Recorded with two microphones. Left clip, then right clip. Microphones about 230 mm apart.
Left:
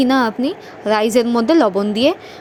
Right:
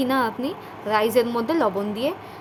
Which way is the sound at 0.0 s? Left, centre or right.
Left.